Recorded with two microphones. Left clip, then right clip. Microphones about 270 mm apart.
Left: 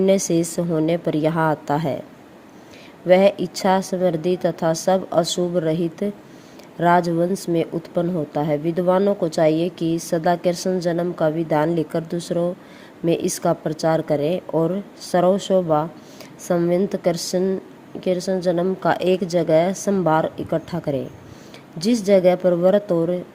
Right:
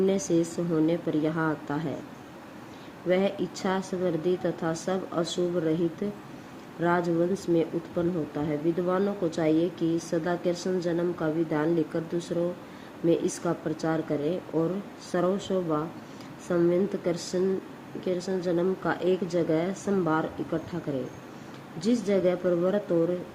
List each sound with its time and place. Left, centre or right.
0.0 s speech: left
3.1 s speech: left